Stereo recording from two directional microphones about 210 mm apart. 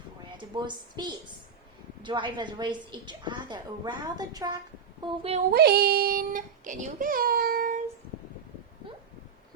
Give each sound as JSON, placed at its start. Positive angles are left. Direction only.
{"t": 0.3, "sound": "a woman's voice", "side_deg": -20}
{"t": 5.5, "sound": "speech", "side_deg": -50}